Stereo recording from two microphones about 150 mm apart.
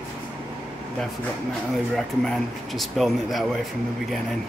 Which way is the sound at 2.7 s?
Centre (ahead or behind).